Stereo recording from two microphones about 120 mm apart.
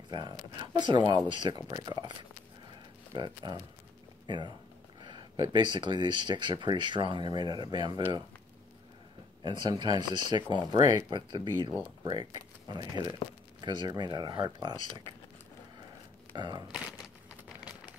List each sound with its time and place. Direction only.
0.1 s speech: 40° right (ahead or behind)
3.4 s speech: 40° right (ahead or behind)
9.4 s speech: 40° right (ahead or behind)
16.3 s speech: 35° right (ahead or behind)